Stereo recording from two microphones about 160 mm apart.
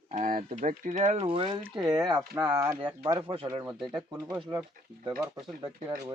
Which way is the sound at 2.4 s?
10° right (ahead or behind).